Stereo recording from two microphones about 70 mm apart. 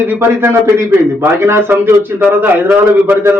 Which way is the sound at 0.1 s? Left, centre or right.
Right.